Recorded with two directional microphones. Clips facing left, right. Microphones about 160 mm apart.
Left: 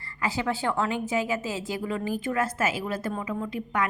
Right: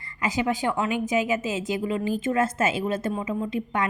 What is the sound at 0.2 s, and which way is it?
A woman's voice, 15° right (ahead or behind).